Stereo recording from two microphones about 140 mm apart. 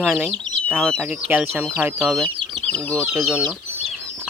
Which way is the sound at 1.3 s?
10° right (ahead or behind).